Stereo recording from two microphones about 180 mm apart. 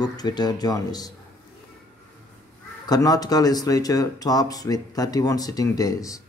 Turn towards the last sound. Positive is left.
turn(degrees=20)  # may be behind; listen again after turning